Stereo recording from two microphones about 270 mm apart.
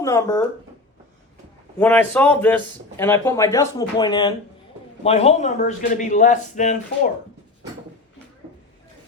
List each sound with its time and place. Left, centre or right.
0.0 s speech: centre
1.8 s a man's voice: centre; by 6.7 s left